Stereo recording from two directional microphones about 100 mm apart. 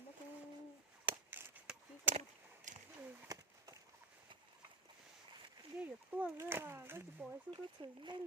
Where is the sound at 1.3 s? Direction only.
20° right (ahead or behind).